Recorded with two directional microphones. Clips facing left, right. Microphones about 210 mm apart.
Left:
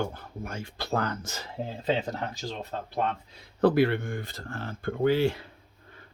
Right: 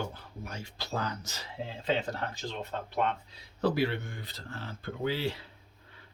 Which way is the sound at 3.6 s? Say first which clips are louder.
Left 7 dB; 55° left (ahead or behind).